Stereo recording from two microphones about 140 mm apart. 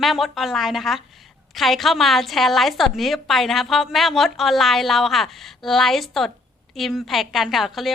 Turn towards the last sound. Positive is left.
turn(degrees=0)  # may be behind; listen again after turning